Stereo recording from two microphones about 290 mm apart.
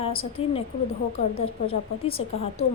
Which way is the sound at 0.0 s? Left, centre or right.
Centre.